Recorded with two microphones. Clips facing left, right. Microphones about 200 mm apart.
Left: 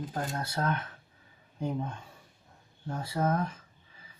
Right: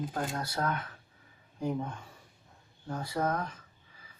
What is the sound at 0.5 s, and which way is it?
Speech, 20° left (ahead or behind).